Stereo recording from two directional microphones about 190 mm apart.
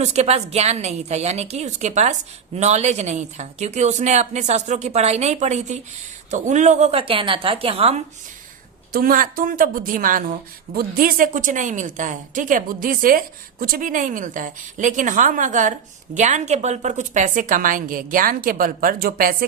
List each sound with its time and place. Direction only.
0.0 s speech: 35° right (ahead or behind)
8.9 s a woman's voice: 50° right (ahead or behind)